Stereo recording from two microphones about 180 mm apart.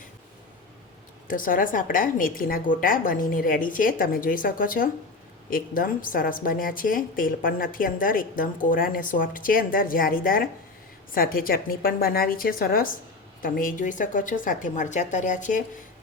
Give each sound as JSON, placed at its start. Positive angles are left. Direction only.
{"t": 1.3, "sound": "a woman's voice", "side_deg": 50}